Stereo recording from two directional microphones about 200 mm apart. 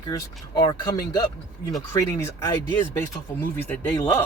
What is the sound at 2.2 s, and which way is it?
Speech, 10° left (ahead or behind).